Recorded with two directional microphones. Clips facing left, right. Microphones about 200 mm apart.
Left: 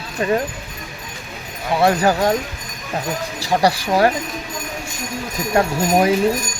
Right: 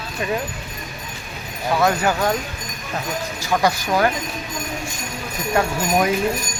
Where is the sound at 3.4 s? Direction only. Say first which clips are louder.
Left 2 dB; 35° left (ahead or behind).